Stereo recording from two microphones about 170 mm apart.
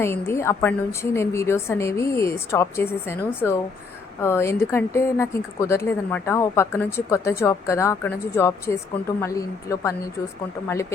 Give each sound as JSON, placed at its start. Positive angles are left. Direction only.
{"t": 0.0, "sound": "a woman's voice", "side_deg": 15}